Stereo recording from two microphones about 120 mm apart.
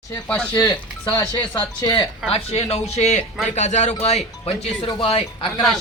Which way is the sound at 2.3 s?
55° left (ahead or behind).